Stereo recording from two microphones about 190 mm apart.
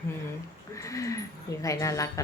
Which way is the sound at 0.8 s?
15° left (ahead or behind).